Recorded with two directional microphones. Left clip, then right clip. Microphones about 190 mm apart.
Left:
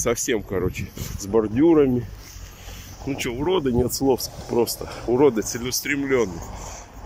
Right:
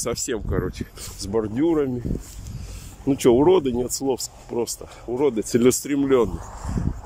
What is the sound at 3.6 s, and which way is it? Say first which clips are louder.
Speech: left 3 dB; centre (ahead or behind).